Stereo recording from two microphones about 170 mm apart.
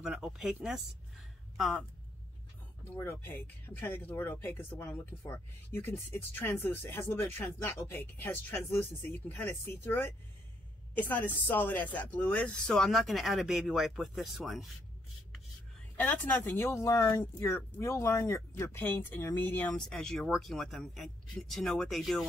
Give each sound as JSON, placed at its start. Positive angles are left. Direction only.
{"t": 0.0, "sound": "speech", "side_deg": 0}
{"t": 3.0, "sound": "speech", "side_deg": 15}
{"t": 16.0, "sound": "speech", "side_deg": 10}